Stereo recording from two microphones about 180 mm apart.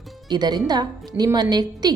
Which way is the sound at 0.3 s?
25° right (ahead or behind).